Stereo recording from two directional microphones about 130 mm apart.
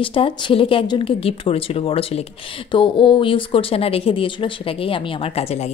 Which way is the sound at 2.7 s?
40° left (ahead or behind).